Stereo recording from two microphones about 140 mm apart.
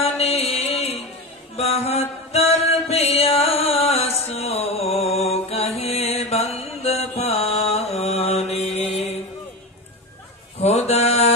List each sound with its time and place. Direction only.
0.0 s music: 50° left (ahead or behind)
1.6 s mantra: 50° left (ahead or behind)
10.6 s mantra: 50° left (ahead or behind)